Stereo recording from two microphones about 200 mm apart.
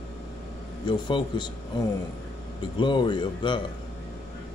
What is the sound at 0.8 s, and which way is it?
Speech, 20° left (ahead or behind).